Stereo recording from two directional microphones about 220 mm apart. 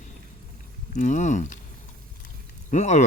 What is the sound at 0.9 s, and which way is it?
Speech, 35° left (ahead or behind).